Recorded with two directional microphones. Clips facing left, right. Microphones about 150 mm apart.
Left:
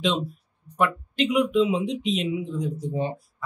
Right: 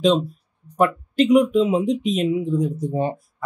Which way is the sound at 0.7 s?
40° right (ahead or behind).